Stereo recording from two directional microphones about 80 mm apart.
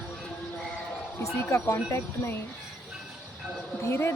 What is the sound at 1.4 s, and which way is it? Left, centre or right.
Speech, left.